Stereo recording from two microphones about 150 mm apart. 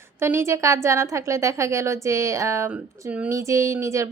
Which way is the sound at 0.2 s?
15° right (ahead or behind).